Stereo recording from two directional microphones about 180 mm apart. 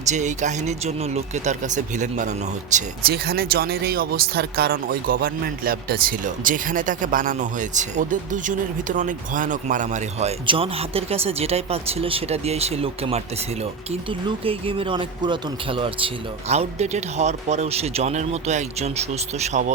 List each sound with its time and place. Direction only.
0.1 s speech: 40° right (ahead or behind)
3.1 s speech: 60° right (ahead or behind); by 19.7 s 40° right (ahead or behind)